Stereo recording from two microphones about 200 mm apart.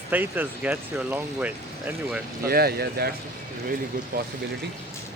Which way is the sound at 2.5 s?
50° right (ahead or behind).